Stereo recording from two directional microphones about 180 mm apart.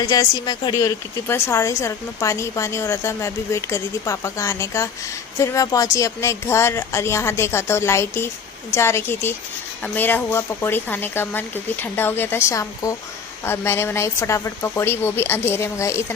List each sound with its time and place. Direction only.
0.0 s a woman's voice: 20° left (ahead or behind)